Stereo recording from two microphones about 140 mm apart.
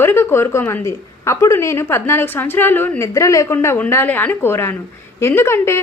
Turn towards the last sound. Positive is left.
turn(degrees=20)  # may be behind; listen again after turning